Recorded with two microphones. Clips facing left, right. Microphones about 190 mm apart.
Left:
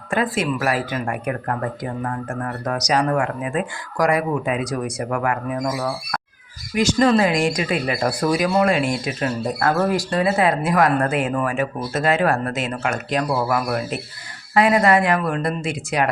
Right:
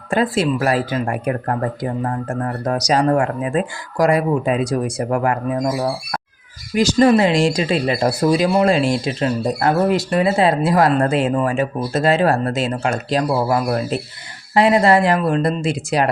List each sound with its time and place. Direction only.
0.1 s speech: 30° right (ahead or behind)
6.9 s speech: 25° right (ahead or behind)